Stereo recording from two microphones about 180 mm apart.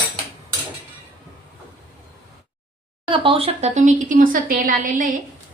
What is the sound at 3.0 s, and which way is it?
Speech, 30° right (ahead or behind).